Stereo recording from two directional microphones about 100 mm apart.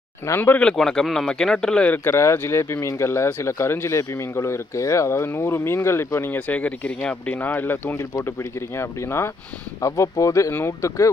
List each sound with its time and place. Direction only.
0.3 s speech: 20° left (ahead or behind)
0.6 s speech: 5° left (ahead or behind)
2.0 s speech: 25° left (ahead or behind)